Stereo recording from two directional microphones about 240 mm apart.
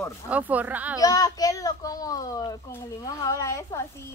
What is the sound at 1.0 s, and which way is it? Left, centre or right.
A child's voice, centre.